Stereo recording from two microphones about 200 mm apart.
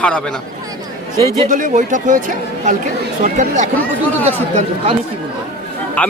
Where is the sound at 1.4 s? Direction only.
40° right (ahead or behind).